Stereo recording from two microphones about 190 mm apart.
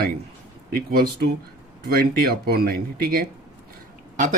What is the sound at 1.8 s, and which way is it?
Speech, 55° right (ahead or behind).